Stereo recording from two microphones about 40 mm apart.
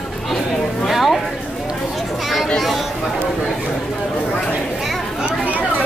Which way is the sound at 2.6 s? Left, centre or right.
Centre.